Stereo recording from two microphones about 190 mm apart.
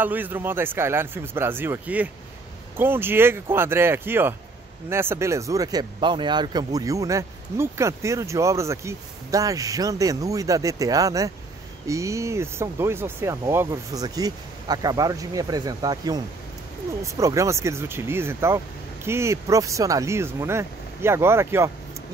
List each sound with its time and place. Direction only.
0.0 s speech: 10° right (ahead or behind)